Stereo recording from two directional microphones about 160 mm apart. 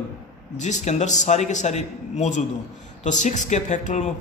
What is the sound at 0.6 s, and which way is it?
A man's voice, 45° left (ahead or behind).